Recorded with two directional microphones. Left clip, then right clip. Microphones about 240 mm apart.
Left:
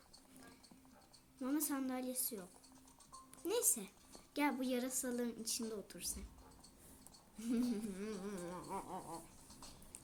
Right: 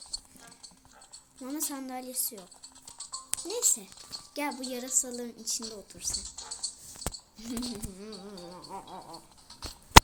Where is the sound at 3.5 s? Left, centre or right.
Centre.